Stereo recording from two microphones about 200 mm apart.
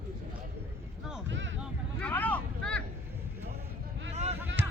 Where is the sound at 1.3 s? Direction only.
70° right (ahead or behind).